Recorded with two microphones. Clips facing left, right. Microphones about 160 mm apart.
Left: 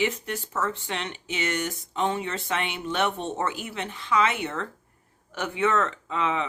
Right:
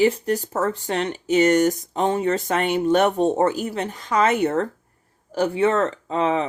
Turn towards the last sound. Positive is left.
turn(degrees=-35)  # may be behind; listen again after turning